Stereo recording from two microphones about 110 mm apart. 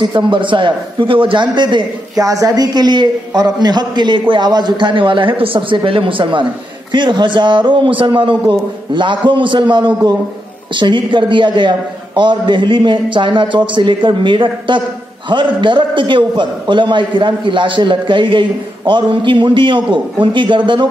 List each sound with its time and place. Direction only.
0.0 s a man's voice: 45° right (ahead or behind)
2.2 s a man's voice: 30° right (ahead or behind); by 20.8 s 45° right (ahead or behind)